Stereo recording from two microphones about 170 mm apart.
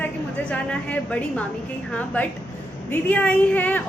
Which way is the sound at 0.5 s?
10° left (ahead or behind).